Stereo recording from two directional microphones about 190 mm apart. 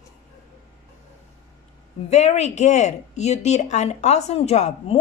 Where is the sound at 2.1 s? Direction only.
35° left (ahead or behind).